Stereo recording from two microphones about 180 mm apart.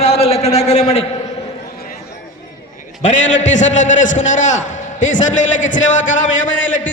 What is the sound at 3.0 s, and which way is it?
A man's voice, 40° left (ahead or behind).